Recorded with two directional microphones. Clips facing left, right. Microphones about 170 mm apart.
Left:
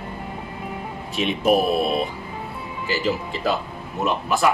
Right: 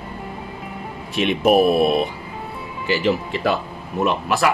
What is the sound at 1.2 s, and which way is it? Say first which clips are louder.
Speech: right 4 dB; 65° right (ahead or behind).